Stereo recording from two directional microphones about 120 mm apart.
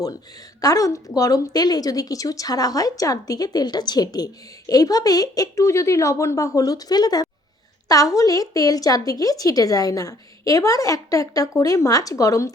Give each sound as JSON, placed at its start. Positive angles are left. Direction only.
{"t": 0.6, "sound": "a woman's voice", "side_deg": 30}